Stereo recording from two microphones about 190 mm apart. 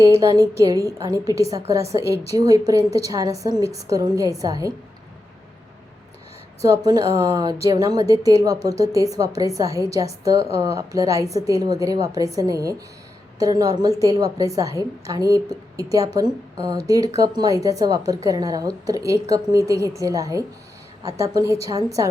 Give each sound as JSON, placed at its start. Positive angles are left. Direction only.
{"t": 0.0, "sound": "a woman's voice", "side_deg": -15}
{"t": 6.6, "sound": "a woman's voice", "side_deg": -20}